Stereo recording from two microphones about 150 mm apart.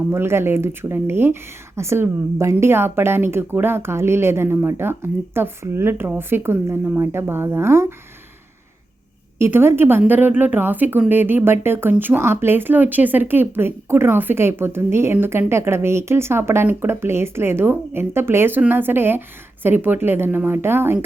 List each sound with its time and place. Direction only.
0.1 s speech: 15° right (ahead or behind)
9.4 s speech: 15° right (ahead or behind)